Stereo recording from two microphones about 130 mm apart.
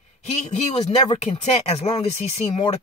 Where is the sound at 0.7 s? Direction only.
55° left (ahead or behind).